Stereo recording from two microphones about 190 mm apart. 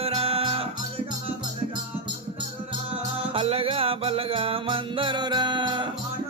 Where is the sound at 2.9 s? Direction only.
30° right (ahead or behind).